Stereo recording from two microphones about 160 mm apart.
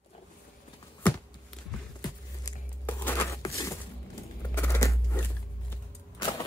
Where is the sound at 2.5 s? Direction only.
25° left (ahead or behind).